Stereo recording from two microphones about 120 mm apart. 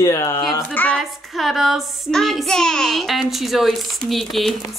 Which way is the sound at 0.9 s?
Centre (ahead or behind).